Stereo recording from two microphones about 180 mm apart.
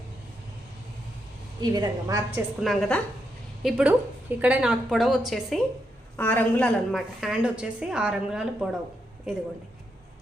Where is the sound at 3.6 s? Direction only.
5° right (ahead or behind).